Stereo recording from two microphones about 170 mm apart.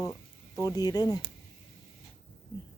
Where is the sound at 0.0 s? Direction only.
20° left (ahead or behind).